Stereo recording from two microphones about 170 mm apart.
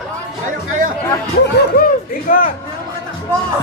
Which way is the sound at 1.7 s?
65° left (ahead or behind).